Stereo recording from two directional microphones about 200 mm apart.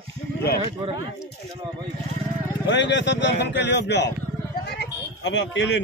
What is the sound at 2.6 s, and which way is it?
Speech, 60° left (ahead or behind).